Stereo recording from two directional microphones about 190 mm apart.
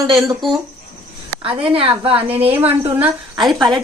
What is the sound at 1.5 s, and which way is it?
Speech, 30° right (ahead or behind).